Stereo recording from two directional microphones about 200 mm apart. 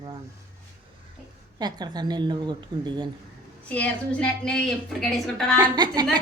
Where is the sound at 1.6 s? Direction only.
20° right (ahead or behind).